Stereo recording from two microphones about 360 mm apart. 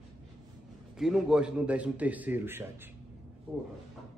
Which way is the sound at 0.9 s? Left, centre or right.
Centre.